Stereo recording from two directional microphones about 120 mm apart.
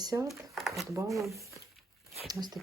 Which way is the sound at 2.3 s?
35° right (ahead or behind).